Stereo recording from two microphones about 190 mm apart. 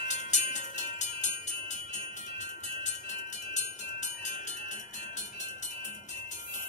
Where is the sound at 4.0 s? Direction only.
40° left (ahead or behind).